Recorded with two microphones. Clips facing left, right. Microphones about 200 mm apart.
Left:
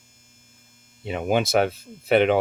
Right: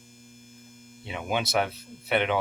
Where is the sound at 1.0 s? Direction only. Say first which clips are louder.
Left 7 dB; 45° left (ahead or behind).